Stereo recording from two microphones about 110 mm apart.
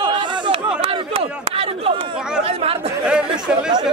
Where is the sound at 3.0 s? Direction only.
10° right (ahead or behind).